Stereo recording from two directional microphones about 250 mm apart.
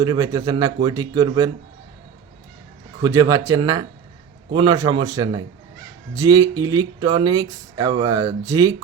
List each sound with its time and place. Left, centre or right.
0.0 s speech: centre
3.0 s speech: centre